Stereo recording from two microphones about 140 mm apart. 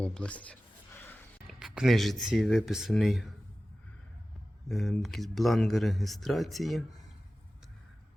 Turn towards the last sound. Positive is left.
turn(degrees=0)  # may be behind; listen again after turning